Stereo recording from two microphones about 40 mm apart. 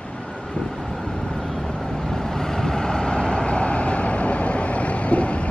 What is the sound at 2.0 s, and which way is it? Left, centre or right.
Vehicle, centre.